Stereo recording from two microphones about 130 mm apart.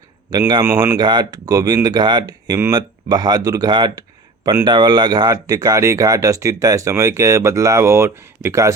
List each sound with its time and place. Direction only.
0.3 s speech: 30° right (ahead or behind)